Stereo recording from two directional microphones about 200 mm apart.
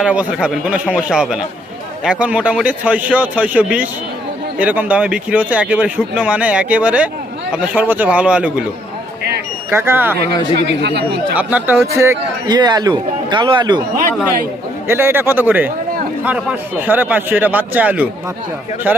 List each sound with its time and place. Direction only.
0.0 s a man's voice: 5° right (ahead or behind)
9.6 s speech: 10° right (ahead or behind)
10.7 s speech: 60° right (ahead or behind)
11.3 s speech: 10° right (ahead or behind)
14.8 s speech: 10° right (ahead or behind)